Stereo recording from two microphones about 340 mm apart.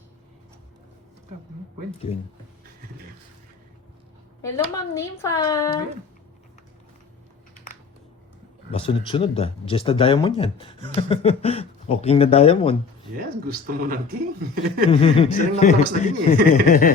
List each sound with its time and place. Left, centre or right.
4.4 s speech: centre
8.7 s speech: centre
13.5 s speech: right
14.8 s speech: centre
16.6 s a sound: left